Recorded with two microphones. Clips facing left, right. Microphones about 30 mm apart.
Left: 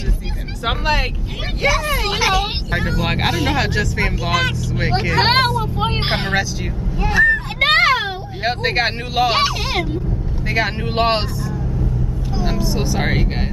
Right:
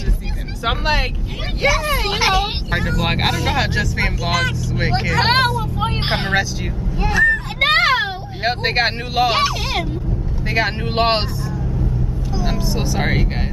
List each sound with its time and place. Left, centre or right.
0.7 s speech: centre
2.1 s speech: centre
3.0 s speech: centre
4.2 s speech: centre
5.9 s vehicle: centre
6.1 s speech: centre
7.1 s a sound: centre
7.9 s speech: centre
10.5 s speech: centre
12.4 s speech: centre